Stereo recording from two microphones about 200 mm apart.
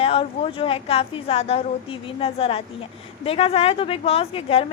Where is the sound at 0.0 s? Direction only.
30° left (ahead or behind).